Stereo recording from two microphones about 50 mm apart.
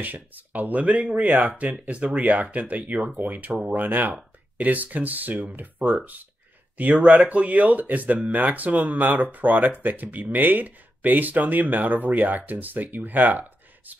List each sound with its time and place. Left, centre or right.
0.0 s speech: right